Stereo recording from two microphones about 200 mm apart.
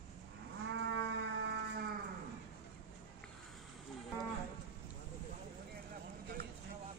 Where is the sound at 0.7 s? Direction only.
70° right (ahead or behind).